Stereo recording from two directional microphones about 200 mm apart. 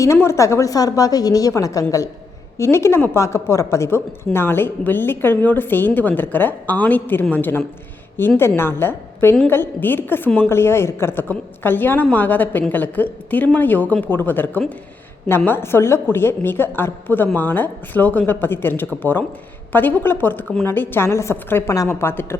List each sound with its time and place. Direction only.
0.0 s a woman's voice: 15° left (ahead or behind)